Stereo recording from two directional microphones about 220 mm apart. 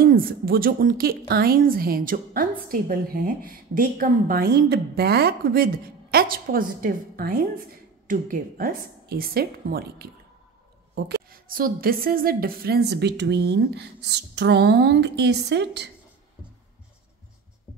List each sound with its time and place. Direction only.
0.0 s a woman's voice: 40° right (ahead or behind)